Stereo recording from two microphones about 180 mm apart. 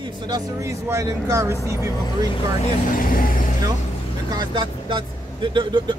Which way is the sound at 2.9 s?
50° left (ahead or behind).